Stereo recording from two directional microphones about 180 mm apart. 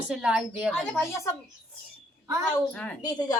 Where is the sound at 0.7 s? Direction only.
10° left (ahead or behind).